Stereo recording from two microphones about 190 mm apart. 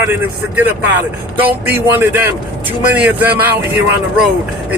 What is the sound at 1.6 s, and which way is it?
Speech, 10° right (ahead or behind).